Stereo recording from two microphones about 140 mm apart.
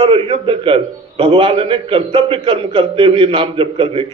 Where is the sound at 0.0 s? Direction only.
40° right (ahead or behind).